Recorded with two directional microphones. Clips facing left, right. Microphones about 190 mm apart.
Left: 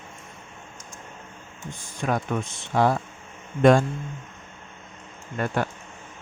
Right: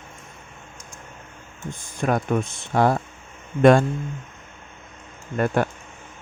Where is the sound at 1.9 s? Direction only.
50° right (ahead or behind).